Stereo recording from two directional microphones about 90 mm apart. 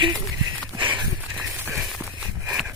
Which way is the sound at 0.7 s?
60° right (ahead or behind).